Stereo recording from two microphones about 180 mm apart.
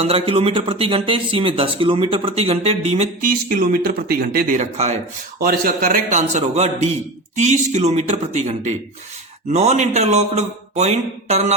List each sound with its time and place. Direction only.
0.0 s speech: 30° right (ahead or behind)
5.4 s speech: 55° right (ahead or behind); by 11.5 s 40° right (ahead or behind)